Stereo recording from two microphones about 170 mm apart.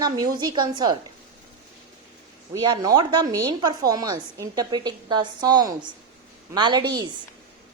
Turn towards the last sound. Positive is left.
turn(degrees=-25)  # may be behind; listen again after turning